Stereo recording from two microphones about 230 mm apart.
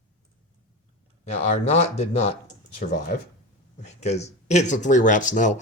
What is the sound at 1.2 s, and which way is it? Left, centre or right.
Speech, left.